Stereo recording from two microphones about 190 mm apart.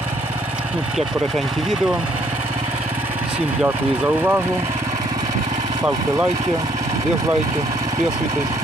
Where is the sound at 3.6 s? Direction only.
10° right (ahead or behind).